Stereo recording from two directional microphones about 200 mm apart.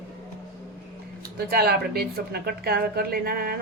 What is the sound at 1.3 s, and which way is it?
A woman's voice, 50° right (ahead or behind).